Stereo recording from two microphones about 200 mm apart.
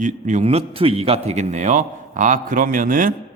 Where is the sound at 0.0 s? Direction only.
35° right (ahead or behind).